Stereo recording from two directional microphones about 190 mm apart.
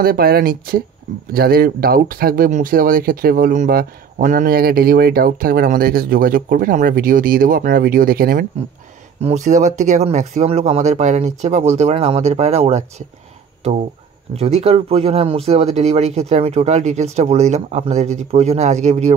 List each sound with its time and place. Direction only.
0.0 s speech: 55° right (ahead or behind)
9.2 s speech: 40° right (ahead or behind)
14.3 s speech: 35° right (ahead or behind)